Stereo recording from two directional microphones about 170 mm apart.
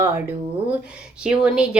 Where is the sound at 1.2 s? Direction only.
5° right (ahead or behind).